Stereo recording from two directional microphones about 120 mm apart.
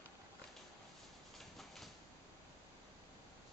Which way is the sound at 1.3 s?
Centre (ahead or behind).